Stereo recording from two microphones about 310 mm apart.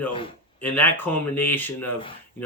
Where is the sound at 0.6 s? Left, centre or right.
Centre.